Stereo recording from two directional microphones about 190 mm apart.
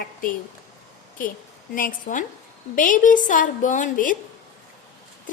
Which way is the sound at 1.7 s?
45° left (ahead or behind).